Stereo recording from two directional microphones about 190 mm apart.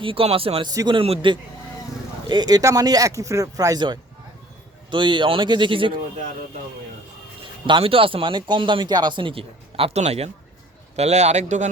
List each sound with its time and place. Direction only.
0.0 s speech: 30° right (ahead or behind)
7.7 s speech: 30° right (ahead or behind)